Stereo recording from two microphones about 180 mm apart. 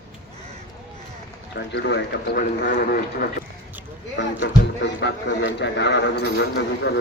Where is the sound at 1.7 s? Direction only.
70° left (ahead or behind).